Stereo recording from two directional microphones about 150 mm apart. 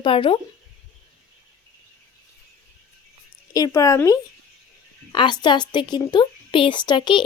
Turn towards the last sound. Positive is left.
turn(degrees=30)  # may be behind; listen again after turning